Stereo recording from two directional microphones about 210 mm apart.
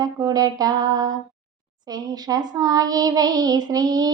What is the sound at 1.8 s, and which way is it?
Child singing, 20° right (ahead or behind).